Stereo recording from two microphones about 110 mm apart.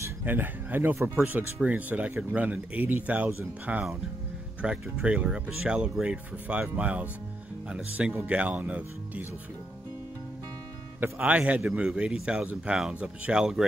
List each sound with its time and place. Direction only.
0.0 s a man's voice: 15° right (ahead or behind)
11.0 s a man's voice: 15° right (ahead or behind)